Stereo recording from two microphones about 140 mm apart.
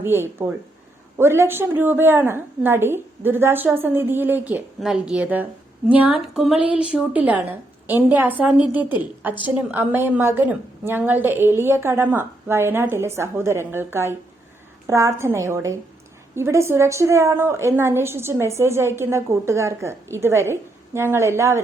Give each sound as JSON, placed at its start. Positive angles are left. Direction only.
{"t": 0.0, "sound": "a woman's voice", "side_deg": -15}